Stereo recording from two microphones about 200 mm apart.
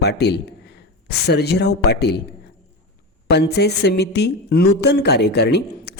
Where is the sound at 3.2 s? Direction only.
55° left (ahead or behind).